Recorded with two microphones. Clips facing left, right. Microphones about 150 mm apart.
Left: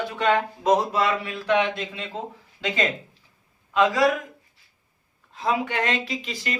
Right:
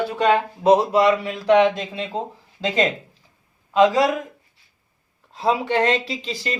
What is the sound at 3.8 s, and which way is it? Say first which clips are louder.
Speech: right 4 dB; 25° right (ahead or behind).